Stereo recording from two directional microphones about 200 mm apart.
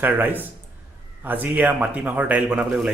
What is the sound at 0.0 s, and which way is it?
Speech, 10° right (ahead or behind).